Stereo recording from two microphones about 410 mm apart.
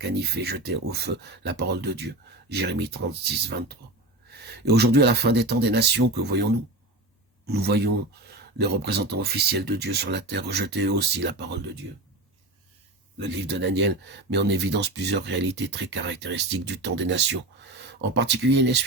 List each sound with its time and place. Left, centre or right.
0.0 s speech: right
13.1 s speech: right